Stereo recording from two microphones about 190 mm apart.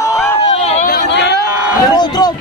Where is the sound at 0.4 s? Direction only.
35° left (ahead or behind).